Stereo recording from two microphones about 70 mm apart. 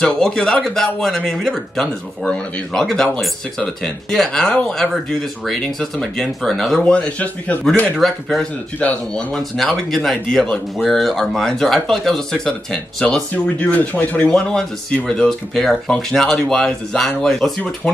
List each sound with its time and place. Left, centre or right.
0.0 s speech: centre
6.8 s speech: centre
8.0 s speech: centre
8.4 s speech: centre